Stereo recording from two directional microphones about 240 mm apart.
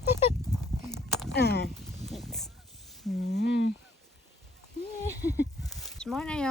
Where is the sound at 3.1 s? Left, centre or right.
Left.